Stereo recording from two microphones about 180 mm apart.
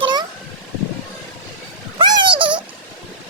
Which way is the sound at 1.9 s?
25° right (ahead or behind).